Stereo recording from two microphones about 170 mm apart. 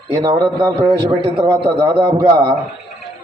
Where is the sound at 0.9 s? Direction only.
30° right (ahead or behind).